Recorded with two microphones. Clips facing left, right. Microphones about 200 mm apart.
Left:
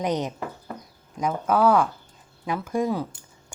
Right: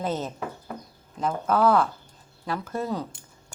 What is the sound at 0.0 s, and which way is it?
A woman's voice, 15° left (ahead or behind).